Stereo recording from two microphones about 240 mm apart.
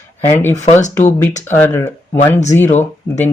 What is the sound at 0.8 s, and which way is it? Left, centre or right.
Speech, left.